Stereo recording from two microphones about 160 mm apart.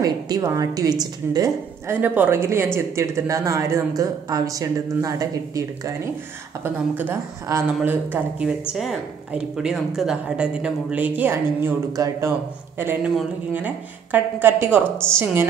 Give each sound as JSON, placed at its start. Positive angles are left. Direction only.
{"t": 0.0, "sound": "a woman's voice", "side_deg": -20}